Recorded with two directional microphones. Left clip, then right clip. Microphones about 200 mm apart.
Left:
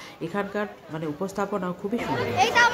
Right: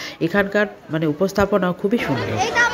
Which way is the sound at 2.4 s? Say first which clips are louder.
Right 1 dB; 40° left (ahead or behind).